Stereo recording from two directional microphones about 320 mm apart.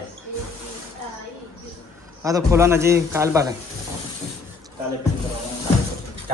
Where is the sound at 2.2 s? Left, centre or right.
Centre.